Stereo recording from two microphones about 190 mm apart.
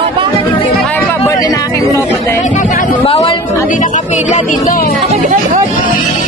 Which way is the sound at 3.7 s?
40° left (ahead or behind).